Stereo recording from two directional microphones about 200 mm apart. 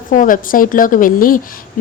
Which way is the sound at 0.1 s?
45° left (ahead or behind).